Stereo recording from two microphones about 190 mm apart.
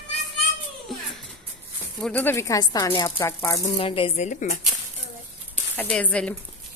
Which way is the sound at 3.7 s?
30° left (ahead or behind).